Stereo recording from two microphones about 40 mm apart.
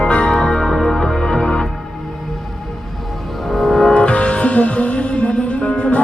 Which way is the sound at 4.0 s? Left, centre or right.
Left.